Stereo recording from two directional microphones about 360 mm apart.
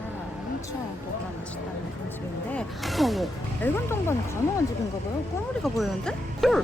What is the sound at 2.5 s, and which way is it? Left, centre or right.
Speech, centre.